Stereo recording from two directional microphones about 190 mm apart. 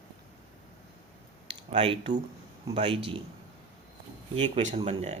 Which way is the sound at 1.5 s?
30° right (ahead or behind).